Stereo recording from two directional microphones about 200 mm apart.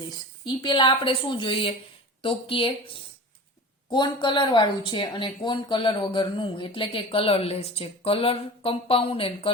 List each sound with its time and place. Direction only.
0.4 s speech: 25° left (ahead or behind)